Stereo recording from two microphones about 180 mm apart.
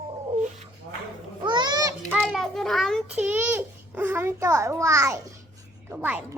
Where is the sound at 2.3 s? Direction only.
Centre (ahead or behind).